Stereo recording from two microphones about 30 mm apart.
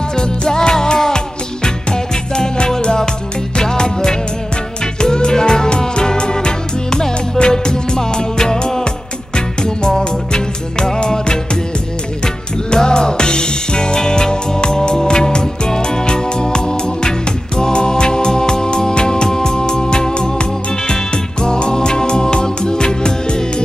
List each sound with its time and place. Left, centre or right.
0.2 s music: left
12.7 s music: left